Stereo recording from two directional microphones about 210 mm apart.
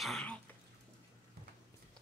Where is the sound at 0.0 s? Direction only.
5° left (ahead or behind).